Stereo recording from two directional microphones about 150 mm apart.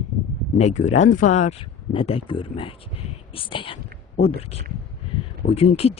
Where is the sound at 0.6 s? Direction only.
50° left (ahead or behind).